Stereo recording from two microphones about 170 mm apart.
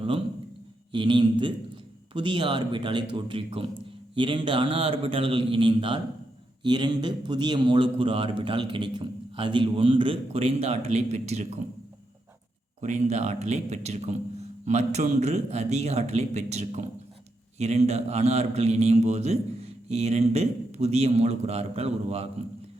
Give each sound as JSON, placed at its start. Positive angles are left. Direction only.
{"t": 0.9, "sound": "a man's voice", "side_deg": -25}
{"t": 12.8, "sound": "a man's voice", "side_deg": -45}